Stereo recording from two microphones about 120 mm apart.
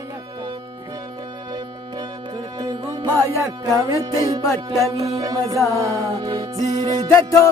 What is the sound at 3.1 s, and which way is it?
Music, 20° left (ahead or behind).